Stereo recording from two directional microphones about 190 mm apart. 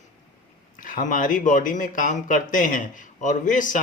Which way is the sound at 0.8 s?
45° left (ahead or behind).